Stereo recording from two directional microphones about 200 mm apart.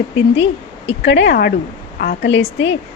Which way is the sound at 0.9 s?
65° left (ahead or behind).